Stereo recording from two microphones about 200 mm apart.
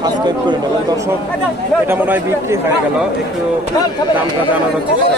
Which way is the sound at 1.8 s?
10° right (ahead or behind).